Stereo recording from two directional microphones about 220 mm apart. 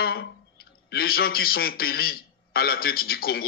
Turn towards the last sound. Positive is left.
turn(degrees=45)  # may be behind; listen again after turning